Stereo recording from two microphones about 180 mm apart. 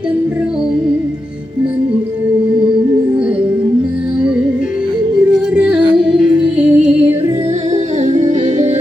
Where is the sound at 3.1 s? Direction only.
5° right (ahead or behind).